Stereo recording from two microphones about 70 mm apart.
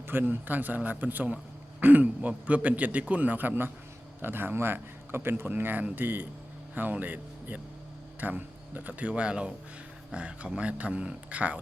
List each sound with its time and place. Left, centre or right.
0.1 s a man's voice: right